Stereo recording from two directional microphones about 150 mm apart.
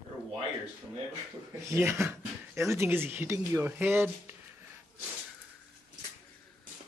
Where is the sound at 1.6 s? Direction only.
15° right (ahead or behind).